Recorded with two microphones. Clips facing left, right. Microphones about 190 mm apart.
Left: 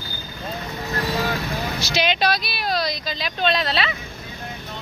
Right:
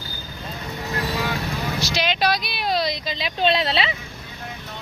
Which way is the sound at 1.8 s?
Centre (ahead or behind).